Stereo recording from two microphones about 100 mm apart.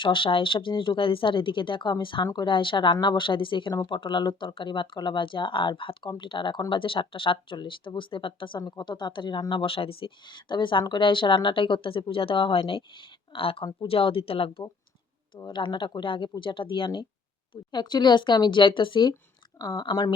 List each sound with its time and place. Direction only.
0.0 s speech: 55° left (ahead or behind)
8.5 s speech: 40° left (ahead or behind); by 14.6 s 65° left (ahead or behind)
15.4 s speech: 50° left (ahead or behind)